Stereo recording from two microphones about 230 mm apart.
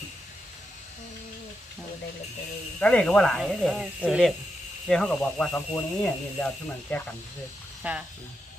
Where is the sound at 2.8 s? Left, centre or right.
Centre.